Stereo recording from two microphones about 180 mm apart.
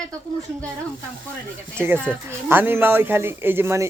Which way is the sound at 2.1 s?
10° right (ahead or behind).